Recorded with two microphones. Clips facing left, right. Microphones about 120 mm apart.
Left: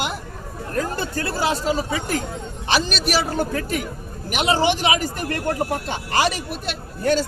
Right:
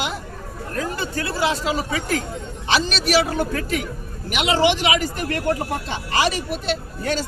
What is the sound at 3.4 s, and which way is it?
A man's voice, 40° left (ahead or behind).